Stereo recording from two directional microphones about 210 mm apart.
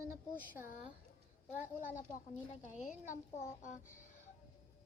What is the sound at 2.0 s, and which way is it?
A woman's voice, 35° left (ahead or behind).